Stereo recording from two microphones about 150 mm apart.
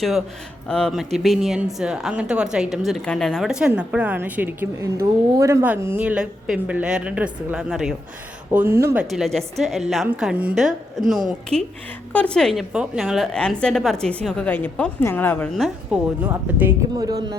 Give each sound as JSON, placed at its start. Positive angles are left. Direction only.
{"t": 0.7, "sound": "a woman's voice", "side_deg": 5}
{"t": 8.5, "sound": "a woman's voice", "side_deg": -15}
{"t": 9.0, "sound": "speech", "side_deg": 0}
{"t": 15.5, "sound": "speech", "side_deg": 0}
{"t": 16.2, "sound": "a woman's voice", "side_deg": -10}
{"t": 17.0, "sound": "speech", "side_deg": -25}